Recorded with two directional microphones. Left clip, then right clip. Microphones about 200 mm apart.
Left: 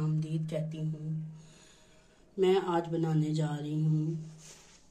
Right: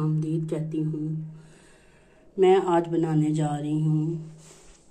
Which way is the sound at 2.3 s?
5° right (ahead or behind).